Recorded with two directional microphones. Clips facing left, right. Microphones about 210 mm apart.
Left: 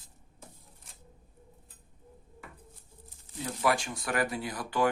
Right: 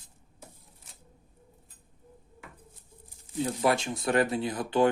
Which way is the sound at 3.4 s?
25° right (ahead or behind).